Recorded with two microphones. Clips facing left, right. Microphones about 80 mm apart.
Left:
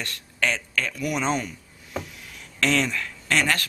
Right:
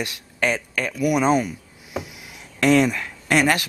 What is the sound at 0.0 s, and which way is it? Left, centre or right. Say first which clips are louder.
Speech: right 3 dB; centre.